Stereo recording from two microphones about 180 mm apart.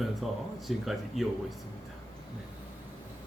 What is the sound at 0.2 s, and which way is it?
Speech, centre (ahead or behind).